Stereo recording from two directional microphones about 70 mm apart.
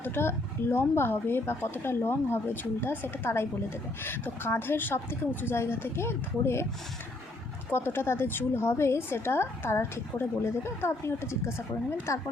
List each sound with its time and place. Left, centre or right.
0.0 s a woman's voice: left
7.7 s a woman's voice: left